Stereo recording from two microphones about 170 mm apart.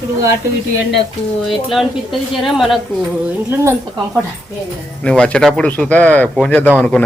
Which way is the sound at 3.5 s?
15° right (ahead or behind).